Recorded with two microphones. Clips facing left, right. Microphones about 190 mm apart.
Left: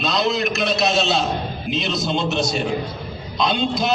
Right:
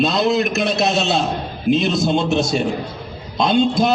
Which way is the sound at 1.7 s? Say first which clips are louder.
Right 7 dB; 55° right (ahead or behind).